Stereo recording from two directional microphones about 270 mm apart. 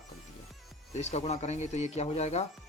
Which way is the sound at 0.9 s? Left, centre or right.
Left.